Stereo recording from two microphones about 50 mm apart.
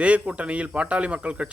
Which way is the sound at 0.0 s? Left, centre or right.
Right.